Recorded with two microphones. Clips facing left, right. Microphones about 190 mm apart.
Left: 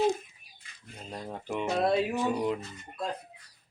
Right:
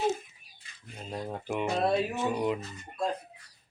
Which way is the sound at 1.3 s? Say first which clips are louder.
Even; 5° right (ahead or behind).